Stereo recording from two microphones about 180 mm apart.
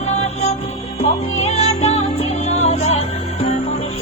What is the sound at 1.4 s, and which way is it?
Music, 35° left (ahead or behind).